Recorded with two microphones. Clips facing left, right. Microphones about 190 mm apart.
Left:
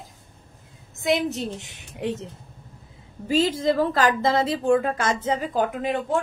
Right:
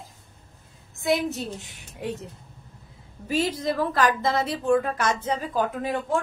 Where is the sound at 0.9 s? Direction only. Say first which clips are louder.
Left 1 dB; 20° left (ahead or behind).